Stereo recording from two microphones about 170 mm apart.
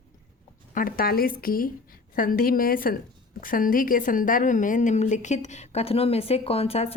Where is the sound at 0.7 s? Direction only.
55° left (ahead or behind).